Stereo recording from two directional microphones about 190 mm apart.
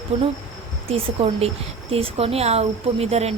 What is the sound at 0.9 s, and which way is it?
Speech, 30° right (ahead or behind).